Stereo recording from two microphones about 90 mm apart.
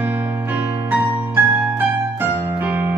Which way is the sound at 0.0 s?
20° right (ahead or behind).